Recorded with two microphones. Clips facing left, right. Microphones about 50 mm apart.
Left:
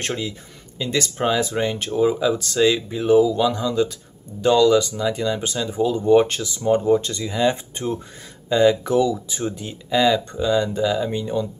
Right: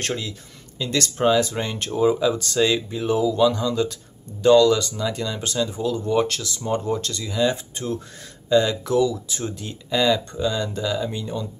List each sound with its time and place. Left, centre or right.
0.0 s speech: centre